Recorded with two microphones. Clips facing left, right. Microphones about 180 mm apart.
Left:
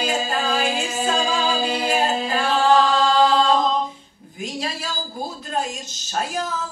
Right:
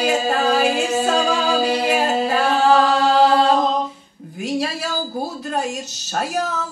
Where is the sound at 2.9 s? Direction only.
65° right (ahead or behind).